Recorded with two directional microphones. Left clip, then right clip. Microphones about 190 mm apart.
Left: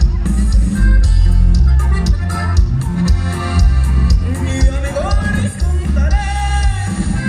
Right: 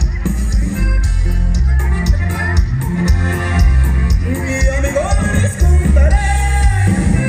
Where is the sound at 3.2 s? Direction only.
15° right (ahead or behind).